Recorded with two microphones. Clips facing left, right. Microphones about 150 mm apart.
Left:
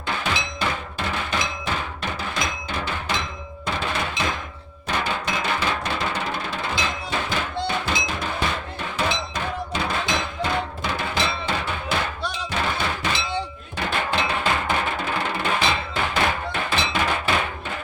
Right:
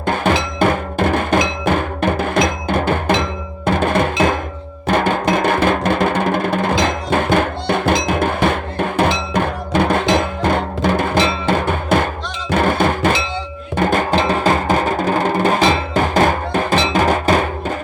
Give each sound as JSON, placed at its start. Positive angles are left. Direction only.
{"t": 0.0, "sound": "music", "side_deg": -50}
{"t": 3.7, "sound": "percussion", "side_deg": -50}
{"t": 4.9, "sound": "drum", "side_deg": -50}
{"t": 12.5, "sound": "music", "side_deg": -50}